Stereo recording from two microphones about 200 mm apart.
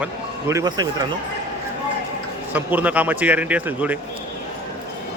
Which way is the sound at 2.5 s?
10° right (ahead or behind).